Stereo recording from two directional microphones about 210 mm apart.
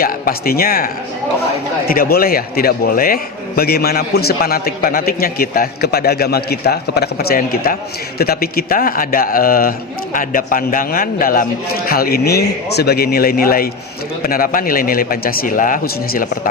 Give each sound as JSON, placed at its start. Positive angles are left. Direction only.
{"t": 0.0, "sound": "a man's voice", "side_deg": 45}
{"t": 1.9, "sound": "a man's voice", "side_deg": 45}